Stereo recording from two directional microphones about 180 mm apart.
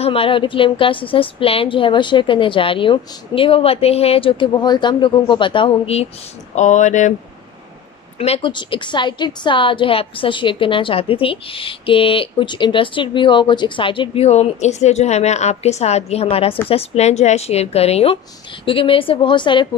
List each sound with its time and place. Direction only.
0.0 s a woman's voice: 30° left (ahead or behind)
8.2 s a woman's voice: 30° left (ahead or behind)